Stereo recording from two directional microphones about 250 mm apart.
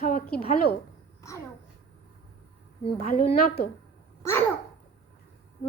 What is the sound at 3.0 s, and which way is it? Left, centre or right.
Speech, left.